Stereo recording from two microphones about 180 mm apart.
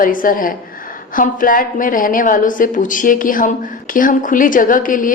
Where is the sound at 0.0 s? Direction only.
50° left (ahead or behind).